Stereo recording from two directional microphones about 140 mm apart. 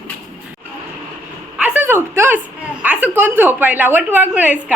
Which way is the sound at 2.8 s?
10° right (ahead or behind).